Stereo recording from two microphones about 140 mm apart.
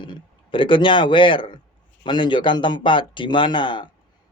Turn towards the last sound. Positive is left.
turn(degrees=35)  # may be behind; listen again after turning